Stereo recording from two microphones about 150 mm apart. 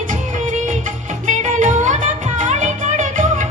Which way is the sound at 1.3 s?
60° right (ahead or behind).